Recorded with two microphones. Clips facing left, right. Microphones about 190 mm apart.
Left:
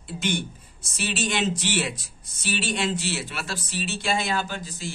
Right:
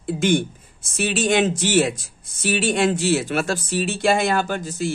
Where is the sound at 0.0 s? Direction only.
50° right (ahead or behind).